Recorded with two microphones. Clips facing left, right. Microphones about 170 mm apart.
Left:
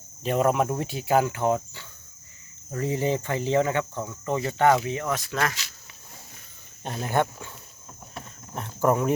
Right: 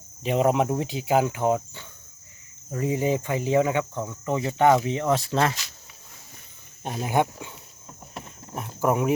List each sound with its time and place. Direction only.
0.2 s speech: 15° right (ahead or behind)
6.8 s speech: 10° right (ahead or behind)
8.1 s a sound: 10° right (ahead or behind)